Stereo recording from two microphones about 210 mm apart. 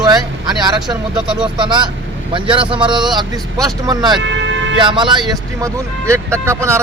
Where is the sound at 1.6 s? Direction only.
20° right (ahead or behind).